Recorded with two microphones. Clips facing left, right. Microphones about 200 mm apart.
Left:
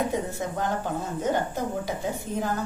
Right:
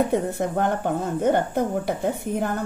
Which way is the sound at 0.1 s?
60° right (ahead or behind).